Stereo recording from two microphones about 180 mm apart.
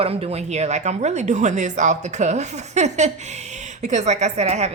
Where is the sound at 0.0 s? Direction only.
35° right (ahead or behind).